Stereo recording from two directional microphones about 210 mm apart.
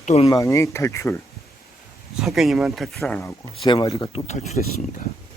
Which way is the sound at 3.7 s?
15° left (ahead or behind).